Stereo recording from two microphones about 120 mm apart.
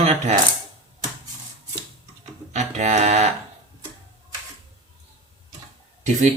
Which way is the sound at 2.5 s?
75° right (ahead or behind).